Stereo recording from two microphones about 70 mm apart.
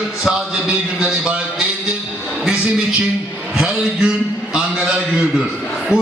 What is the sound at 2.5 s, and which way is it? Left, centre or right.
A man's voice, centre.